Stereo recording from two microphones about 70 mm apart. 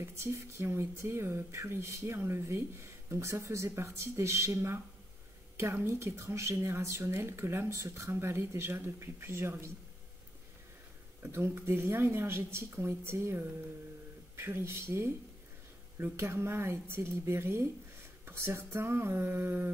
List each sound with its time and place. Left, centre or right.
0.0 s speech: right
11.3 s speech: right